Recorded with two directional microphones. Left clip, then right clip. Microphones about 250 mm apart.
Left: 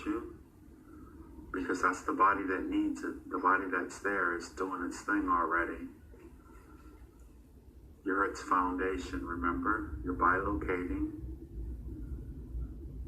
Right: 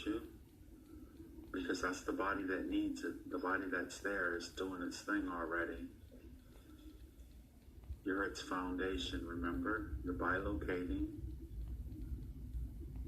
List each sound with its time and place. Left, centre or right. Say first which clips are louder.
1.5 s a man's voice: left 9 dB; right
8.0 s a man's voice: left 8 dB; right